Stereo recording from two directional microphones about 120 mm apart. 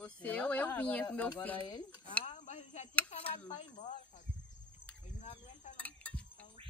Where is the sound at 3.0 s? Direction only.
65° left (ahead or behind).